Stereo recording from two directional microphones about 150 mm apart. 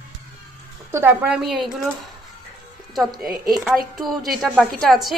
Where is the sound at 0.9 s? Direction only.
10° right (ahead or behind).